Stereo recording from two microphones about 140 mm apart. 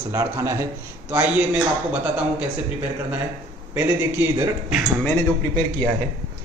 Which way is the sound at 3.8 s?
15° right (ahead or behind).